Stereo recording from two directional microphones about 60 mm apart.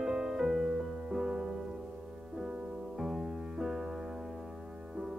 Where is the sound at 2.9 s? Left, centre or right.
Centre.